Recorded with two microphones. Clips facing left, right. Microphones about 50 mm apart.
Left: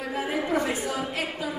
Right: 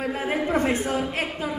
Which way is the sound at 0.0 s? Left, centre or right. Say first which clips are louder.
Right 3 dB; right.